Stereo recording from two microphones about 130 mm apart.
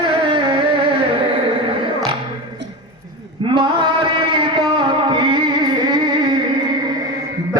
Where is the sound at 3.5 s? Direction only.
40° right (ahead or behind).